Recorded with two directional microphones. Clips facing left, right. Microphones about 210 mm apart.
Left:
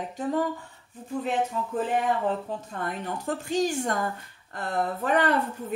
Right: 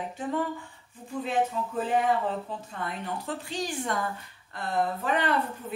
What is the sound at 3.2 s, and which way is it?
Speech, 45° left (ahead or behind).